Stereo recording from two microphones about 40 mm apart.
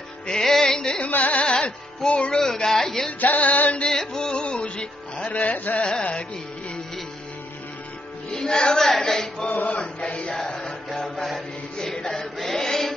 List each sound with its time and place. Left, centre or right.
0.3 s music: centre
1.0 s carnatic music: left
1.4 s music: left
2.4 s speech: centre
3.2 s carnatic music: left
3.9 s music: centre
5.4 s carnatic music: left
8.3 s music: left
9.0 s chant: centre
9.5 s chant: left
11.8 s chant: centre